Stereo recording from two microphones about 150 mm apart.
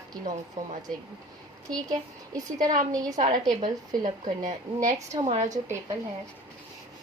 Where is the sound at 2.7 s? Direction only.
60° right (ahead or behind).